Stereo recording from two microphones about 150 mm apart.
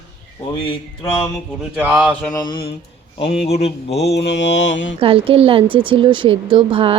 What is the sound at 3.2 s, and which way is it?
Speech, 45° left (ahead or behind).